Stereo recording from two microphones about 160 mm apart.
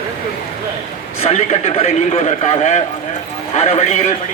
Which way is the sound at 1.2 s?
40° left (ahead or behind).